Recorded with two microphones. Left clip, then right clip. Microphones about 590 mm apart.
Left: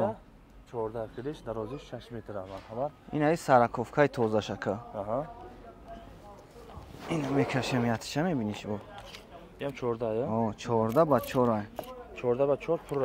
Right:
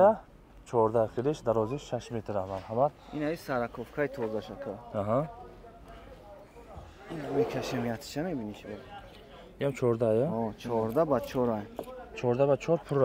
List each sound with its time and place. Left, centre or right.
0.7 s speech: right; by 2.5 s centre
3.2 s speech: left
4.9 s speech: right
7.1 s speech: centre
9.6 s speech: right
10.3 s speech: centre
12.2 s speech: right